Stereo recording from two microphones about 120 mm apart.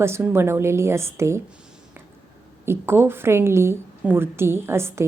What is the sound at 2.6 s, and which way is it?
A woman's voice, 20° right (ahead or behind).